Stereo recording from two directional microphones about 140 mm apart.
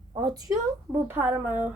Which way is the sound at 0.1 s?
30° right (ahead or behind).